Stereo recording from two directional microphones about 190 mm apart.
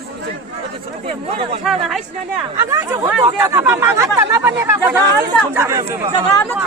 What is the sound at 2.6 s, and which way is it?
Speech, 15° right (ahead or behind).